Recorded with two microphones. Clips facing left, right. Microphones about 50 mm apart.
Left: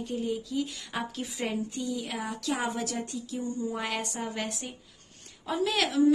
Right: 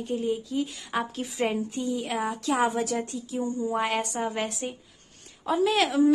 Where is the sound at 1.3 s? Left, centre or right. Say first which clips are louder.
Right 5 dB; right.